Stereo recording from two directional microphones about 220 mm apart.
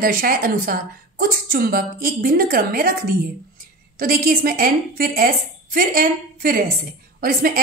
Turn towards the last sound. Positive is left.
turn(degrees=-40)  # may be behind; listen again after turning